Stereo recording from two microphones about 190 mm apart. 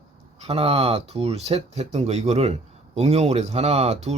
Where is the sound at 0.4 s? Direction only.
30° right (ahead or behind).